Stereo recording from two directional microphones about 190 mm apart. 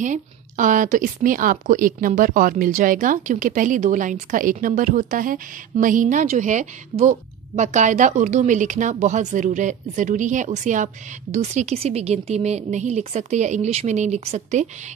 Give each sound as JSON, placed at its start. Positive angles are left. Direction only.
{"t": 0.0, "sound": "a woman's voice", "side_deg": -40}